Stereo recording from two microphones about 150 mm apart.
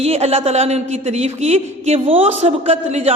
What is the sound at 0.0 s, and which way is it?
A man's voice, 45° right (ahead or behind).